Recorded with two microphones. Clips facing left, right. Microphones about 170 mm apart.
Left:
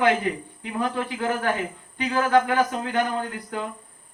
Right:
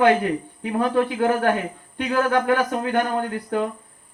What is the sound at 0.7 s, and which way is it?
Speech, 55° right (ahead or behind).